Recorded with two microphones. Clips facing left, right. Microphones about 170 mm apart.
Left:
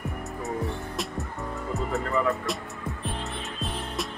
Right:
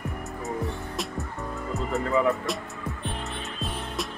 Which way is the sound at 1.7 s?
Centre (ahead or behind).